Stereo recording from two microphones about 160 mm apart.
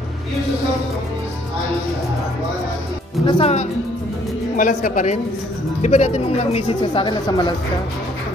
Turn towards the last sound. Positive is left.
turn(degrees=30)  # may be behind; listen again after turning